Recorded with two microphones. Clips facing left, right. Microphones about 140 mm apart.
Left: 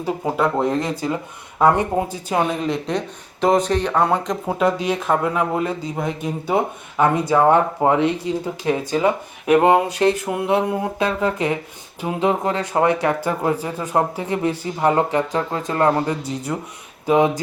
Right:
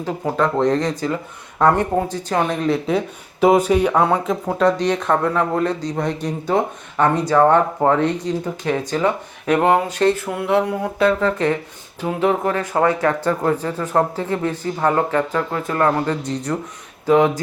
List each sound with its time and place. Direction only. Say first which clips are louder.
0.0 s speech: even; 10° left (ahead or behind)
16.2 s speech: right 2 dB; 5° left (ahead or behind)